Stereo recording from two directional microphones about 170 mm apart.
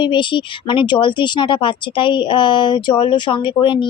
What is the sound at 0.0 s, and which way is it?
A woman's voice, 30° left (ahead or behind).